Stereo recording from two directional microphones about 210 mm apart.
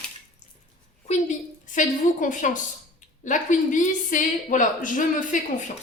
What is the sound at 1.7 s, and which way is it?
Speech, 40° left (ahead or behind).